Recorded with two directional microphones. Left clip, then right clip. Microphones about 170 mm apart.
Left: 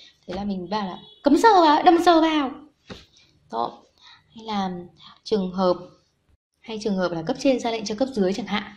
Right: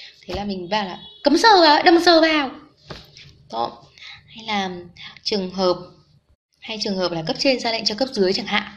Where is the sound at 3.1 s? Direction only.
25° left (ahead or behind).